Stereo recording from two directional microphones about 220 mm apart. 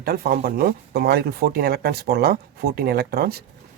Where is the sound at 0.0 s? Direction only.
45° right (ahead or behind).